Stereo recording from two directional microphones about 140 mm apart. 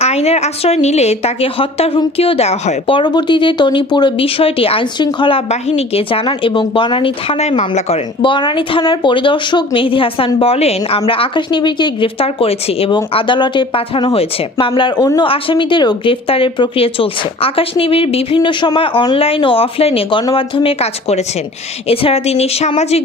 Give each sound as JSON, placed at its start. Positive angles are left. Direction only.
{"t": 0.0, "sound": "a woman's voice", "side_deg": 50}
{"t": 5.5, "sound": "a woman's voice", "side_deg": 50}